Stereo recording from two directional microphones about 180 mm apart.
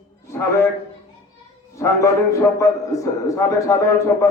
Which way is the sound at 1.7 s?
15° left (ahead or behind).